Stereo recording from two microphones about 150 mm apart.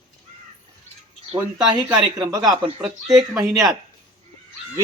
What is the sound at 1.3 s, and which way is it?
Speech, 30° right (ahead or behind).